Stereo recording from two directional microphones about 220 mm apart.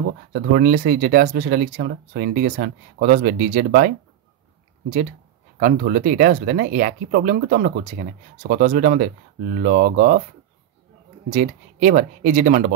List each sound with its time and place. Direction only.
0.3 s speech: 40° right (ahead or behind)
5.6 s speech: 40° right (ahead or behind)
11.2 s speech: 35° right (ahead or behind)